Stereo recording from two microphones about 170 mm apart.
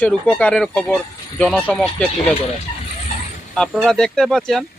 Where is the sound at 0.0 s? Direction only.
5° left (ahead or behind).